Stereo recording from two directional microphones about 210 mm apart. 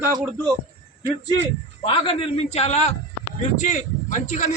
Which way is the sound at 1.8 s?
25° left (ahead or behind).